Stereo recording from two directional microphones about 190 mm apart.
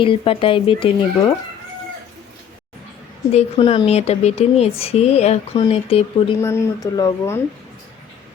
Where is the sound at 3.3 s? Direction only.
30° left (ahead or behind).